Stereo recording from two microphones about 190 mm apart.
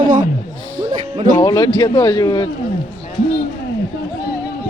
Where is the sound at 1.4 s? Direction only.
25° left (ahead or behind).